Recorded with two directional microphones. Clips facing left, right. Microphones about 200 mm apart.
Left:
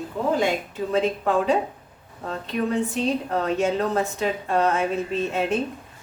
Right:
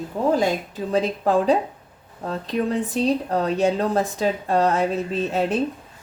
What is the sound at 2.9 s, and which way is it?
A woman's voice, 35° right (ahead or behind).